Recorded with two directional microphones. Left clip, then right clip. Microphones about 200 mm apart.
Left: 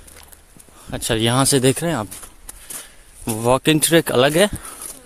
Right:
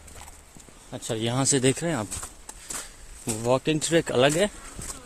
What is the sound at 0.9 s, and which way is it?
Speech, 50° left (ahead or behind).